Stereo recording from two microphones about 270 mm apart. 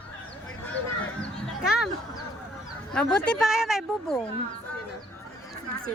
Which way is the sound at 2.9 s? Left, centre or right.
Centre.